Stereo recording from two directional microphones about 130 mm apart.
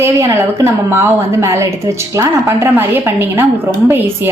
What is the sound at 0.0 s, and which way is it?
A woman's voice, 20° right (ahead or behind).